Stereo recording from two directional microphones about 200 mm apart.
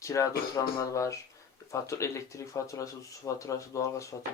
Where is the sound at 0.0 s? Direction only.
15° left (ahead or behind).